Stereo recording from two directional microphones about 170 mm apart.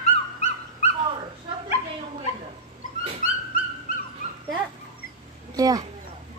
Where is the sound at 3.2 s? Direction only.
55° left (ahead or behind).